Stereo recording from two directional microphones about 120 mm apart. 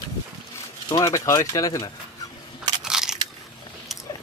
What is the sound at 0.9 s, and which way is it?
Speech, 30° left (ahead or behind).